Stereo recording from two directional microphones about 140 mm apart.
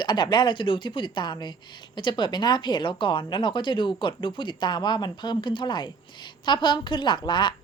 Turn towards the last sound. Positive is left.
turn(degrees=30)  # may be behind; listen again after turning